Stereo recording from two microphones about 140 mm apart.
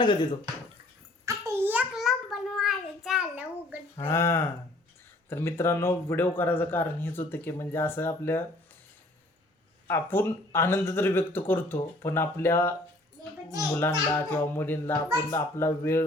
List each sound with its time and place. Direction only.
0.0 s speech: 35° left (ahead or behind)
1.2 s a sound: 20° right (ahead or behind)
4.0 s speech: 20° left (ahead or behind)
9.8 s speech: 15° left (ahead or behind)